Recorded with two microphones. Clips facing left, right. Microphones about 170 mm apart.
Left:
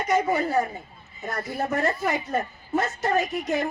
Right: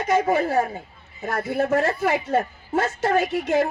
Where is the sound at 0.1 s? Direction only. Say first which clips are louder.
Right 3 dB; 90° right.